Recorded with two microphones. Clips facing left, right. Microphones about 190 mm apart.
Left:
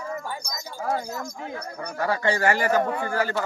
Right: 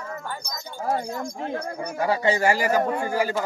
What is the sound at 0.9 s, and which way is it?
Speech, 30° right (ahead or behind).